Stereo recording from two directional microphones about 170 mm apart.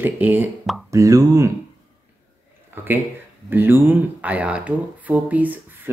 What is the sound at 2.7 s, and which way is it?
Speech, 10° right (ahead or behind).